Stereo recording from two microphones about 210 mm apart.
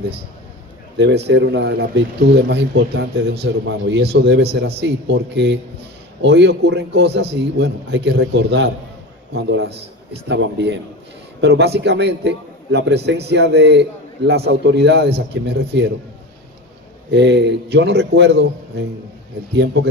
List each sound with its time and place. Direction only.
0.9 s a man's voice: 55° right (ahead or behind)
17.1 s a man's voice: 55° right (ahead or behind)